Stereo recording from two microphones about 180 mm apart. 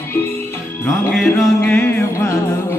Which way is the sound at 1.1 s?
Centre (ahead or behind).